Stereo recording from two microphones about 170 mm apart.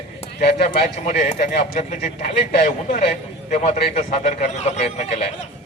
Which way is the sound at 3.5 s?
45° left (ahead or behind).